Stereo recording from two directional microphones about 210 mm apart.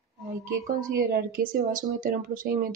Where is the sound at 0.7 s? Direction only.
40° right (ahead or behind).